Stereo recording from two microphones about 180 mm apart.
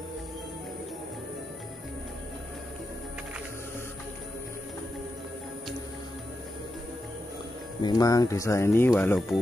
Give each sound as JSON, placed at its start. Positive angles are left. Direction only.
{"t": 7.8, "sound": "speech", "side_deg": 20}